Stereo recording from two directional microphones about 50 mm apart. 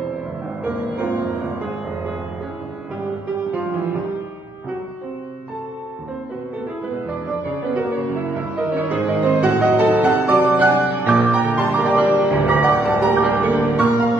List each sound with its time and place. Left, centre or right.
0.7 s music: right
3.5 s music: right
7.1 s music: right